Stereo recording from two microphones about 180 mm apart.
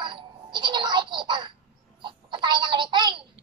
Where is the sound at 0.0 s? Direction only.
25° right (ahead or behind).